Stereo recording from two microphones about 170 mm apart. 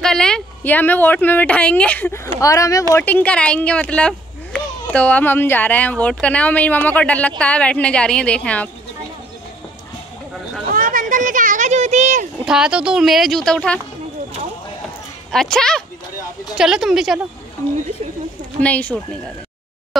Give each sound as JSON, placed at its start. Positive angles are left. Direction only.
{"t": 0.0, "sound": "speech", "side_deg": 5}
{"t": 10.7, "sound": "a sound", "side_deg": -55}
{"t": 12.4, "sound": "speech", "side_deg": -5}
{"t": 15.3, "sound": "speech", "side_deg": 5}
{"t": 18.6, "sound": "speech", "side_deg": 10}